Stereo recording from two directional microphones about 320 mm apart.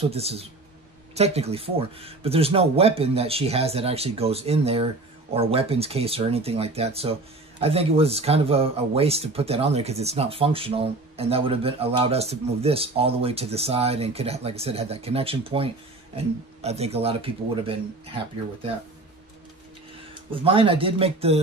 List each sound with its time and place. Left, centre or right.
0.1 s speech: centre
20.2 s speech: centre